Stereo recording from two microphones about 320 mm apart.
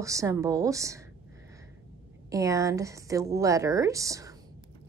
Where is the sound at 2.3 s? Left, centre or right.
Centre.